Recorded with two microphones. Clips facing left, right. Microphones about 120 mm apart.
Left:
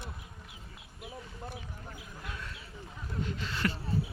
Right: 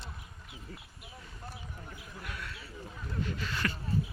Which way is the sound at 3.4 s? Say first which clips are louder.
Left 4 dB; 20° left (ahead or behind).